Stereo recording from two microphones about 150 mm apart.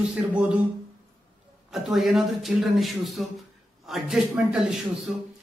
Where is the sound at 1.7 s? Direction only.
Centre (ahead or behind).